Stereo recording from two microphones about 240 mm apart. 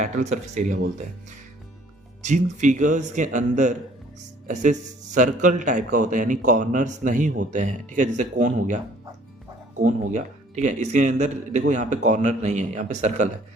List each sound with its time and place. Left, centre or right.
0.0 s a man's voice: right
2.2 s a man's voice: right